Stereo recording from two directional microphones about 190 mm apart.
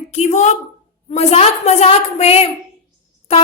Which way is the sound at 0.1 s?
35° left (ahead or behind).